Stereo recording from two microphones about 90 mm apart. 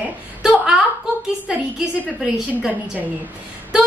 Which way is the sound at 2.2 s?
15° right (ahead or behind).